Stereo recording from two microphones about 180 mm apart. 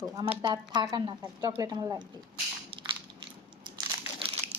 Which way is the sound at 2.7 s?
30° right (ahead or behind).